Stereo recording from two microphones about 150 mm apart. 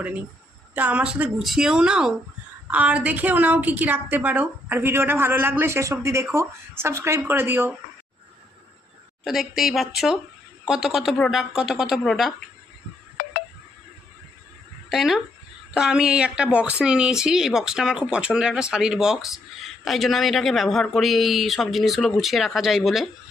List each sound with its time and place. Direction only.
0.8 s a woman's voice: 10° right (ahead or behind)
9.2 s speech: centre (ahead or behind)
14.8 s speech: centre (ahead or behind)